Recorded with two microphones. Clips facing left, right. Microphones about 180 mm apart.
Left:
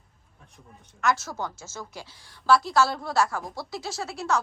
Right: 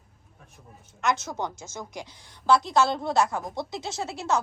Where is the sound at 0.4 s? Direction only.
Centre (ahead or behind).